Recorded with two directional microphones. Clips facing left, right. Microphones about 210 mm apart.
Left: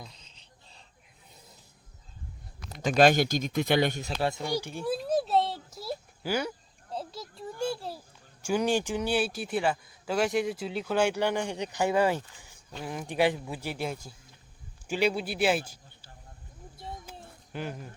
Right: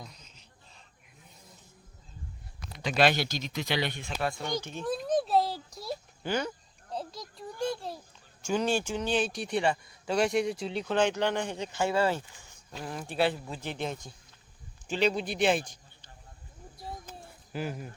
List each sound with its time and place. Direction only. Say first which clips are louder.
0.1 s a sound: right 2 dB; 30° left (ahead or behind)
2.6 s speech: left 4 dB; 45° left (ahead or behind)
4.2 s speech: left 2 dB; 25° left (ahead or behind)
4.4 s a sound: left 2 dB; 10° left (ahead or behind)
7.2 s a child's voice: left 2 dB; 5° left (ahead or behind)
17.5 s speech: right 1 dB; 5° right (ahead or behind)